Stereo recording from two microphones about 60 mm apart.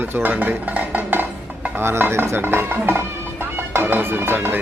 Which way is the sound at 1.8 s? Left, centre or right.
Right.